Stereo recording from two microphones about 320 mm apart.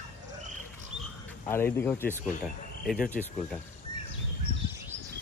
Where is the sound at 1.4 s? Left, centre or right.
Centre.